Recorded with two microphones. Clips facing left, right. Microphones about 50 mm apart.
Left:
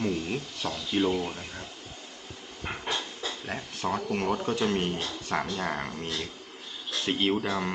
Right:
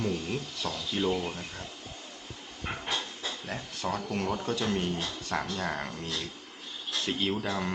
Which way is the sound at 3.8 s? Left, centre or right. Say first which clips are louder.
Left 3 dB; left.